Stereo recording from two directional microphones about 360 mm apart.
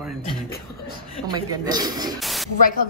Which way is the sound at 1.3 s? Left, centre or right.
Centre.